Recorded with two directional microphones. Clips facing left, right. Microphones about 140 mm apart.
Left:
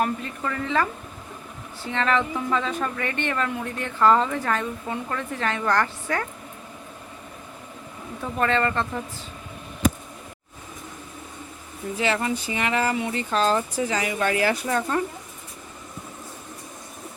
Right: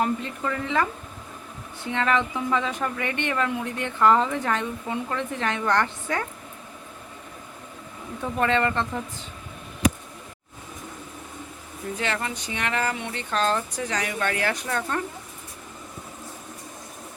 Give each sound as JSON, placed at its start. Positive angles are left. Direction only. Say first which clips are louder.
{"t": 0.0, "sound": "a woman's voice", "louder": "even", "side_deg": -20}
{"t": 8.4, "sound": "speech", "louder": "even", "side_deg": -20}
{"t": 11.9, "sound": "speech", "louder": "left 5 dB", "side_deg": 5}